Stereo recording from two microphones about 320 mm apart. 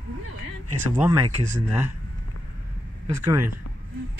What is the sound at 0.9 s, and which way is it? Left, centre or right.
Speech, centre.